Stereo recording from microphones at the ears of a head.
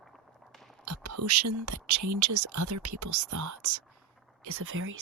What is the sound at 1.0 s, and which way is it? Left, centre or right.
Speech, right.